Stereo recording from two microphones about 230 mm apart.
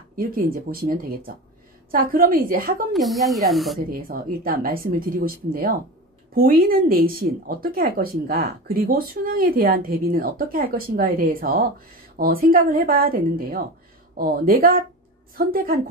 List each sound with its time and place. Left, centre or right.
0.1 s speech: right
2.9 s speech: centre
3.9 s speech: right